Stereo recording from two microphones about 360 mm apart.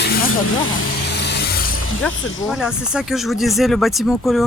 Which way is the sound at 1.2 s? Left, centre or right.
Left.